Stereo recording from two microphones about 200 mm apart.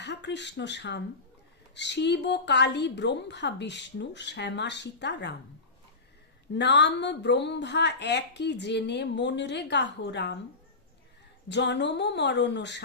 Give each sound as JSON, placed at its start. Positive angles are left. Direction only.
{"t": 0.0, "sound": "a woman's voice", "side_deg": 60}
{"t": 6.5, "sound": "a woman's voice", "side_deg": 60}
{"t": 11.4, "sound": "a woman's voice", "side_deg": 60}